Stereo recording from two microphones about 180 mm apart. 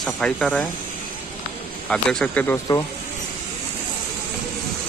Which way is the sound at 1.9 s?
5° left (ahead or behind).